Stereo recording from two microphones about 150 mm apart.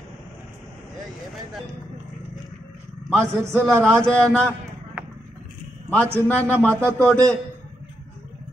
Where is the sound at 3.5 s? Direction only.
15° right (ahead or behind).